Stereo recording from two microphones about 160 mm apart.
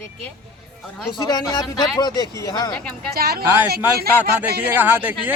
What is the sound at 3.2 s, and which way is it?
Speech, 75° right (ahead or behind).